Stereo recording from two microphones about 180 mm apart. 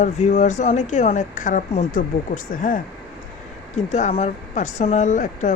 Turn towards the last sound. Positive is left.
turn(degrees=45)  # may be behind; listen again after turning